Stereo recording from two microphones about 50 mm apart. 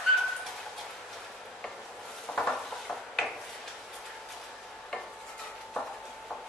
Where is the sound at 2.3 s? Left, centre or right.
Left.